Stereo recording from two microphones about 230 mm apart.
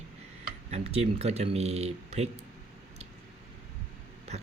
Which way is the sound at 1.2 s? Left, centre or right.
Right.